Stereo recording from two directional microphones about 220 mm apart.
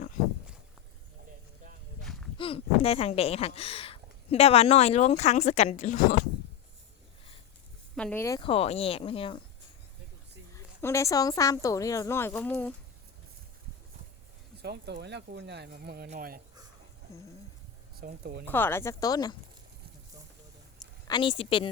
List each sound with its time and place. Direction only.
2.4 s speech: 25° left (ahead or behind)
7.9 s a woman's voice: 5° left (ahead or behind); by 9.4 s 25° left (ahead or behind)
10.5 s speech: 10° left (ahead or behind)
14.6 s speech: 50° right (ahead or behind)
17.9 s speech: 45° right (ahead or behind)
18.4 s speech: 10° left (ahead or behind)
21.1 s a woman's voice: 20° left (ahead or behind)